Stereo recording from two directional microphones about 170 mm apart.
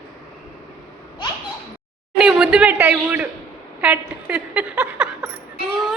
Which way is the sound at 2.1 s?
5° right (ahead or behind).